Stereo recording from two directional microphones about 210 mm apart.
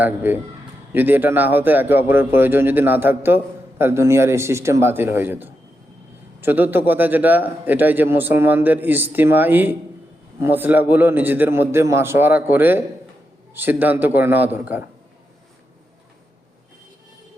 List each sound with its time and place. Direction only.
0.0 s speech: 10° right (ahead or behind)